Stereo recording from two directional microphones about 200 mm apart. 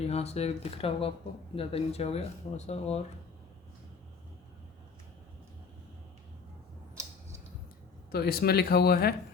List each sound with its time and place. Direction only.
0.0 s speech: 30° left (ahead or behind)
7.0 s a sound: 15° right (ahead or behind)
8.1 s speech: 50° left (ahead or behind)